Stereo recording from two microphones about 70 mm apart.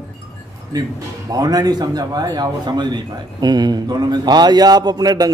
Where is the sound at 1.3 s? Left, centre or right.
Right.